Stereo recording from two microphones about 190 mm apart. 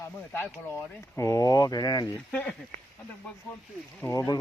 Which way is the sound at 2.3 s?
5° left (ahead or behind).